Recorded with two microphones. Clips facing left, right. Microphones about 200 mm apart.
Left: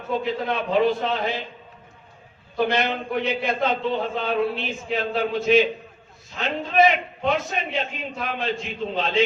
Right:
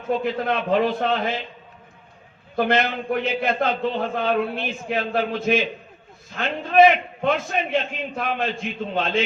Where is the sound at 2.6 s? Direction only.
55° right (ahead or behind).